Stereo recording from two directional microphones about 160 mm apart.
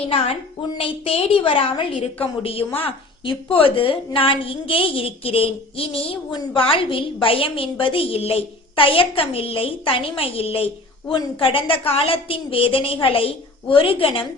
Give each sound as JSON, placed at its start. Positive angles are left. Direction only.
{"t": 0.8, "sound": "a woman's voice", "side_deg": 35}